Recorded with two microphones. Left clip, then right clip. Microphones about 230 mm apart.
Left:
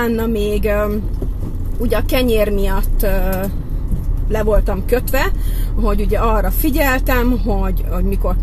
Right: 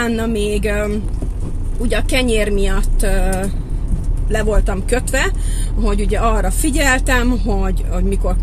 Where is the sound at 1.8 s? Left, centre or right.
Centre.